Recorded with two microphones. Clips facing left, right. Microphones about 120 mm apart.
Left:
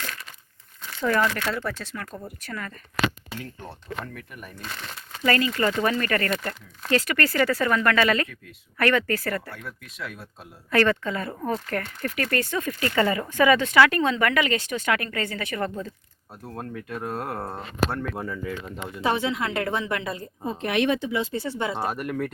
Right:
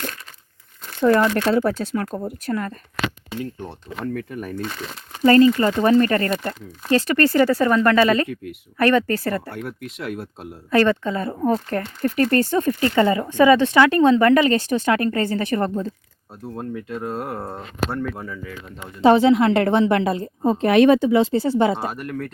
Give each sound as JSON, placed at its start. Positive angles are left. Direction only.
{"t": 1.0, "sound": "speech", "side_deg": -25}
{"t": 1.5, "sound": "speech", "side_deg": -50}
{"t": 4.0, "sound": "speech", "side_deg": -35}
{"t": 9.6, "sound": "speech", "side_deg": -60}
{"t": 10.7, "sound": "speech", "side_deg": -20}
{"t": 16.6, "sound": "speech", "side_deg": -20}
{"t": 17.4, "sound": "speech", "side_deg": 0}
{"t": 19.0, "sound": "speech", "side_deg": -30}
{"t": 20.5, "sound": "speech", "side_deg": -35}
{"t": 21.8, "sound": "speech", "side_deg": 0}